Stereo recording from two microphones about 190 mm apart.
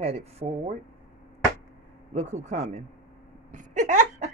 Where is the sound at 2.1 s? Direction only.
35° right (ahead or behind).